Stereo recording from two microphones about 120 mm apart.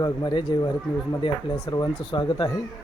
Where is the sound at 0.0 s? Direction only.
35° left (ahead or behind).